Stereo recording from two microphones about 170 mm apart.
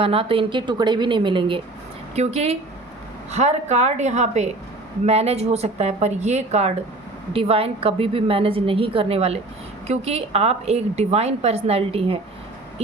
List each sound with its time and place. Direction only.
0.0 s a woman's voice: 35° right (ahead or behind)
2.1 s a woman's voice: 40° right (ahead or behind)